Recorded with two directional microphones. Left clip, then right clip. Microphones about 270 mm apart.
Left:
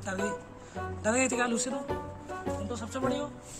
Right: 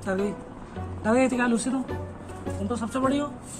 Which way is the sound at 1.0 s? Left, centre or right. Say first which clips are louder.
Right 5 dB; left.